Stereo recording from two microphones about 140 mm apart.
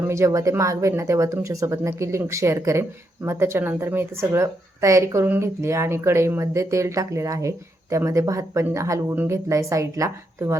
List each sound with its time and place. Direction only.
0.1 s speech: 20° right (ahead or behind)